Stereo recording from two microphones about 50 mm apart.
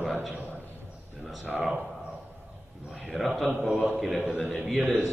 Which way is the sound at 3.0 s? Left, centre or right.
Centre.